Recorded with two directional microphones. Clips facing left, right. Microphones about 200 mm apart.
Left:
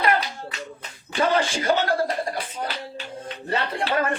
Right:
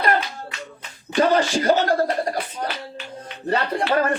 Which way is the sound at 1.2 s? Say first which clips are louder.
Right 4 dB; 40° right (ahead or behind).